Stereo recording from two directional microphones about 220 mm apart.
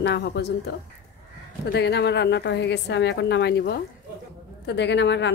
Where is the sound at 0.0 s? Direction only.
50° left (ahead or behind).